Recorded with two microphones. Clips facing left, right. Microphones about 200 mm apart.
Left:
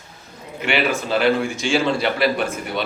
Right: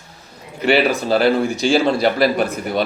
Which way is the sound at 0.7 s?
35° right (ahead or behind).